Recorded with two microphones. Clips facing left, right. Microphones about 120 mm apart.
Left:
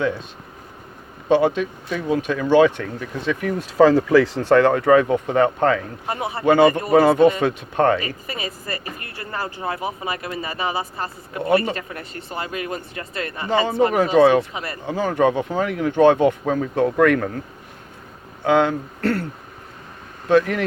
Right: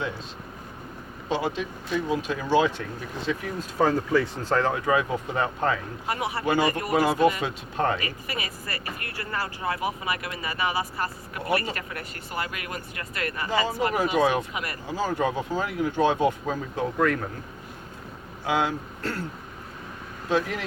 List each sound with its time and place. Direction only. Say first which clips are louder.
1.3 s speech: left 10 dB; 60° left (ahead or behind)
3.2 s speech: left 7 dB; 75° left (ahead or behind)
6.1 s speech: left 2 dB; 25° left (ahead or behind)
6.4 s speech: left 11 dB; 65° left (ahead or behind)
7.4 s speech: left 8 dB; 75° left (ahead or behind)
8.0 s speech: left 4 dB; 25° left (ahead or behind)
13.9 s speech: left 8 dB; 65° left (ahead or behind)
14.5 s speech: left 3 dB; 30° left (ahead or behind)
14.8 s speech: left 8 dB; 65° left (ahead or behind); by 17.2 s 85° left
18.4 s speech: left 8 dB; 60° left (ahead or behind)
20.3 s speech: left 9 dB; 60° left (ahead or behind)